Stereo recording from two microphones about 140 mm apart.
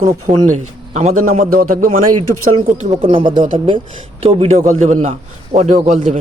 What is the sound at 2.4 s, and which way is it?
Speech, 60° right (ahead or behind).